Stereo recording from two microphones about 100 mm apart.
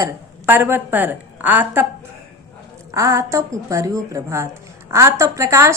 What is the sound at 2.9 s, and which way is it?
A woman's voice, 30° right (ahead or behind).